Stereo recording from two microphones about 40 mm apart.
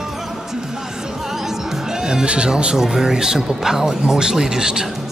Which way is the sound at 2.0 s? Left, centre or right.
Right.